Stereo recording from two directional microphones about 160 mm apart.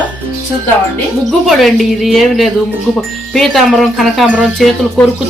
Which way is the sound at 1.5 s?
Centre (ahead or behind).